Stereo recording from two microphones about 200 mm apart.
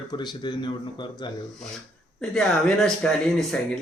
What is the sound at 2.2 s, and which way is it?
Speech, 5° left (ahead or behind).